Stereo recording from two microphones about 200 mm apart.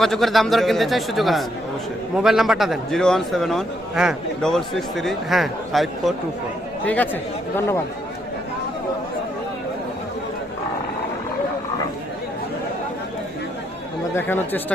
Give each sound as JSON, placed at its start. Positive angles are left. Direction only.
{"t": 0.0, "sound": "a man's voice", "side_deg": 0}
{"t": 14.1, "sound": "speech", "side_deg": 10}